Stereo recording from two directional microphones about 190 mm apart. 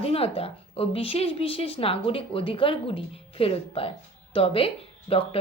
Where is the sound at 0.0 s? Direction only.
30° left (ahead or behind).